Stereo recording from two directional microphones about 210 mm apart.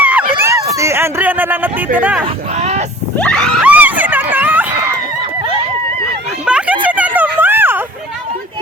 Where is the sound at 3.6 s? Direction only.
5° right (ahead or behind).